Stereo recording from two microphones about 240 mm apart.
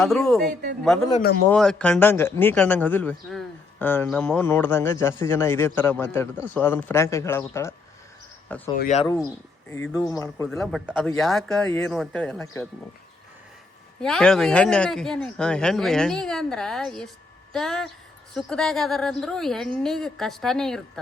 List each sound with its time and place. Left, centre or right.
0.0 s speech: centre
8.8 s speech: left
9.6 s speech: centre
10.5 s speech: centre
14.0 s speech: centre